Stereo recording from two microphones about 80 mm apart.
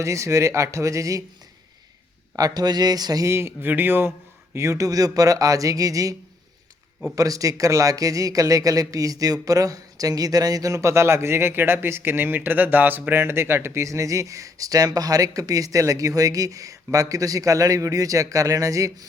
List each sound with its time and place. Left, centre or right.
0.0 s speech: right
2.3 s a man's voice: right
3.2 s speech: right
4.5 s speech: right
7.2 s speech: right